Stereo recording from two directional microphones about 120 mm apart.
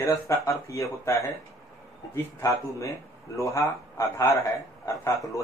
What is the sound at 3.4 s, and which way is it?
A man's voice, 25° left (ahead or behind).